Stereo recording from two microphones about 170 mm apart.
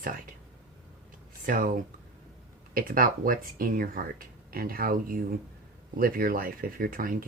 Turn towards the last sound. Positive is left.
turn(degrees=-55)  # may be behind; listen again after turning